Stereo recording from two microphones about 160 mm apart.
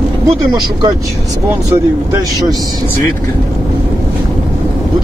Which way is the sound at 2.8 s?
15° left (ahead or behind).